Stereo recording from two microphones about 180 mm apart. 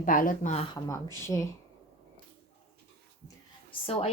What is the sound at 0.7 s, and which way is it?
Speech, 15° left (ahead or behind).